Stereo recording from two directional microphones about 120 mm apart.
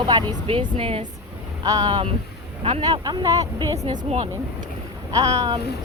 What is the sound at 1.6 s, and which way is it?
Speech, 35° right (ahead or behind).